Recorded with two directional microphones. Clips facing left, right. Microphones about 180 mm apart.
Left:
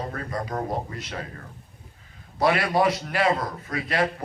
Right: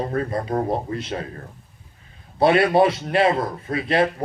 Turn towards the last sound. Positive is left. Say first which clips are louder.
# right 6 dB
turn(degrees=-25)  # may be behind; listen again after turning